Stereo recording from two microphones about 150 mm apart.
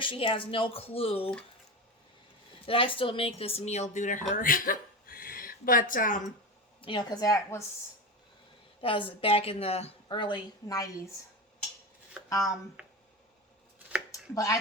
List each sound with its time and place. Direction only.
0.0 s a woman's voice: 35° left (ahead or behind)
2.6 s speech: 35° left (ahead or behind); by 6.3 s 60° left (ahead or behind)
6.8 s a woman's voice: 30° left (ahead or behind)
8.8 s a woman's voice: 35° left (ahead or behind)
12.3 s a woman's voice: 25° left (ahead or behind)
12.8 s a sound: 5° right (ahead or behind)
14.1 s speech: 20° left (ahead or behind)